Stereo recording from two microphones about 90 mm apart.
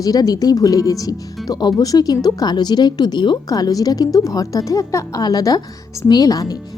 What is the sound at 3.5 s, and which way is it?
A woman's voice, 45° left (ahead or behind).